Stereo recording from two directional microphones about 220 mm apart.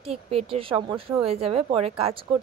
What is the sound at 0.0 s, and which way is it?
A woman's voice, 25° right (ahead or behind).